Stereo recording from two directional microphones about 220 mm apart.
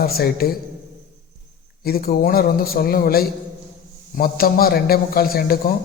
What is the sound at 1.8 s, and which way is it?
A man's voice, 45° left (ahead or behind).